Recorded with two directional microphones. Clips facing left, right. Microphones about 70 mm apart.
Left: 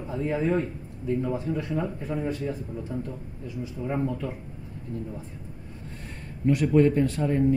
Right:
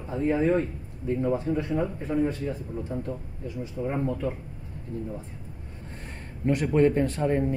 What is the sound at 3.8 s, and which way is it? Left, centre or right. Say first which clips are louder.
Speech: right 2 dB; right.